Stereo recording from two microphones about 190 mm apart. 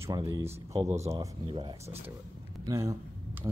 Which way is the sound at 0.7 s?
35° right (ahead or behind).